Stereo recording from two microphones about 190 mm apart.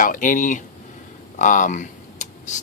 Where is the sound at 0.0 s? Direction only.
45° left (ahead or behind).